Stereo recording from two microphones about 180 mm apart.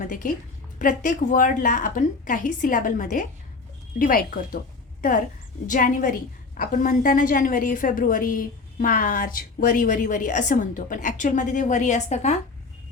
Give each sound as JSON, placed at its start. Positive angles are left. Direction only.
{"t": 0.0, "sound": "a woman's voice", "side_deg": 50}
{"t": 5.6, "sound": "a woman's voice", "side_deg": 45}